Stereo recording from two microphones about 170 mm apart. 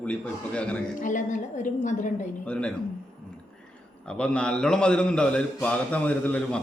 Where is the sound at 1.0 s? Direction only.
50° left (ahead or behind).